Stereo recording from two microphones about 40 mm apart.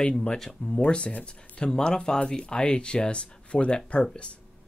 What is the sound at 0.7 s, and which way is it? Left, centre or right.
Speech, left.